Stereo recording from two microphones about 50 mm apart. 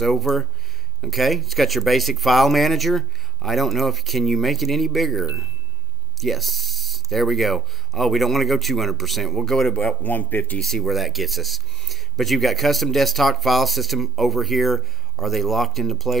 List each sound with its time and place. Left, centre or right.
0.0 s speech: centre
9.8 s speech: left
10.6 s speech: centre